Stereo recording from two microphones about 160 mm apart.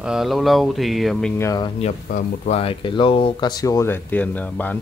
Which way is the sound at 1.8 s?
45° left (ahead or behind).